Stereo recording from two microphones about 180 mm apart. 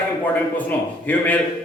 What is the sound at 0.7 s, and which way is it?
Speech, 10° left (ahead or behind).